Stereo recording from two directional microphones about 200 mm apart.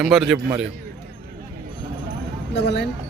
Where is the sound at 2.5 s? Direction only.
60° left (ahead or behind).